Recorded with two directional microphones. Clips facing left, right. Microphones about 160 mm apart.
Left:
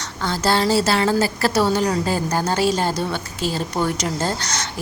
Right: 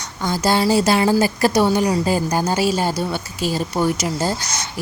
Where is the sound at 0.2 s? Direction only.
15° right (ahead or behind).